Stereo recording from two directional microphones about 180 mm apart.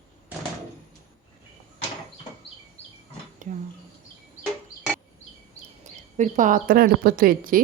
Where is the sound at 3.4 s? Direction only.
45° right (ahead or behind).